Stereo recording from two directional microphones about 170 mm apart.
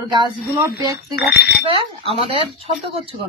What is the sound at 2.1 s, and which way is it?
Speech, 35° right (ahead or behind).